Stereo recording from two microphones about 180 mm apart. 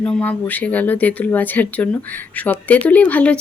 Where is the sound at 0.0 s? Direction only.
10° left (ahead or behind).